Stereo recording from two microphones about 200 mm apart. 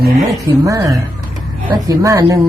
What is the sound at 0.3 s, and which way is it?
Speech, 15° right (ahead or behind).